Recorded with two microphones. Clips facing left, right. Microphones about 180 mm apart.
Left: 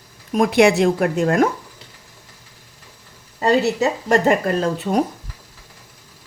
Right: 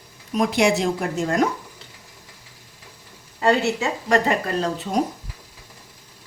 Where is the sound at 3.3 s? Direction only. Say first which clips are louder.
Left 3 dB; 40° left (ahead or behind); by 5.0 s 55° left (ahead or behind).